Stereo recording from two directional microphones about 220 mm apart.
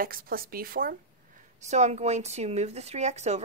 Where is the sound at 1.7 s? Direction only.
30° right (ahead or behind).